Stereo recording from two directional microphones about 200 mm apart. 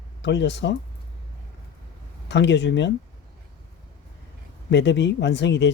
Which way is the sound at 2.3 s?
60° left (ahead or behind).